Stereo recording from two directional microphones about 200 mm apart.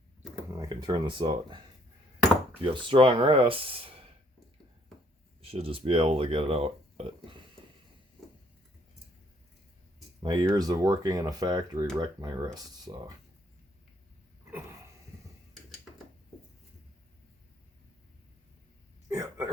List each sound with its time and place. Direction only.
0.5 s speech: 20° right (ahead or behind)
5.4 s speech: 30° right (ahead or behind)
10.2 s speech: 20° right (ahead or behind)
19.0 s hiccup: 15° right (ahead or behind)